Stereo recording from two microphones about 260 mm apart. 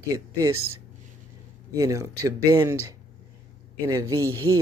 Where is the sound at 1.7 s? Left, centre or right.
Centre.